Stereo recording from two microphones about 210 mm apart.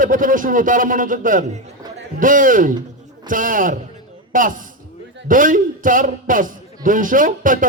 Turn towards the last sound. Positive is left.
turn(degrees=-40)  # may be behind; listen again after turning